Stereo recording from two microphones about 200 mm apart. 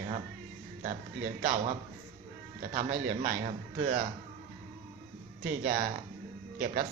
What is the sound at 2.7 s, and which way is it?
A man's voice, 45° right (ahead or behind).